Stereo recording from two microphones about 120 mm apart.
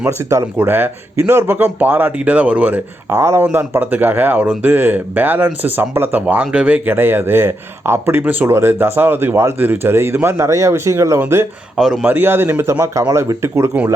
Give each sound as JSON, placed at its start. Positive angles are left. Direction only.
{"t": 0.0, "sound": "speech", "side_deg": -25}